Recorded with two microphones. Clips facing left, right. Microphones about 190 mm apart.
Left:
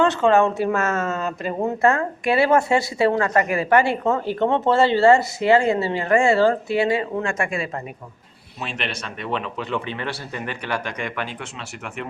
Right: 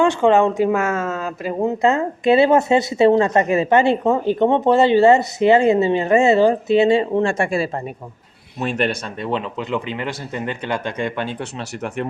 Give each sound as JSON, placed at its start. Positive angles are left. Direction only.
{"t": 0.0, "sound": "speech", "side_deg": -15}
{"t": 1.6, "sound": "speech", "side_deg": -20}
{"t": 9.2, "sound": "speech", "side_deg": -25}